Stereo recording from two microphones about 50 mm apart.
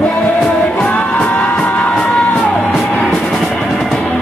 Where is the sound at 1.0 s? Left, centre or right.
Left.